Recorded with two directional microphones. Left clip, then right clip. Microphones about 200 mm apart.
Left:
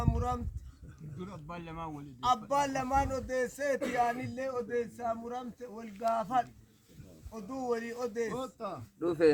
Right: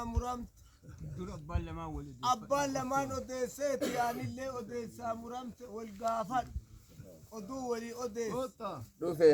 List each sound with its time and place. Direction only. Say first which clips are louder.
0.0 s a sound: left 4 dB; 5° right (ahead or behind)
1.2 s a man's voice: even; 5° left (ahead or behind)
8.4 s speech: even; 20° right (ahead or behind)